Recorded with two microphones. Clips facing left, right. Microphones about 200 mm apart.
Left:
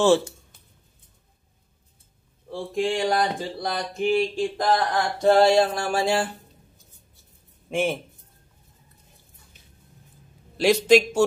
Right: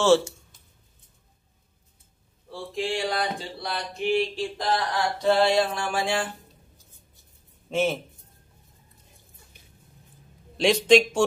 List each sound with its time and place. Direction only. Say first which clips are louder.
2.5 s a sound: left 4 dB; 50° left (ahead or behind)
7.7 s a man's voice: even; 15° left (ahead or behind)
10.6 s a man's voice: left 1 dB; 5° left (ahead or behind)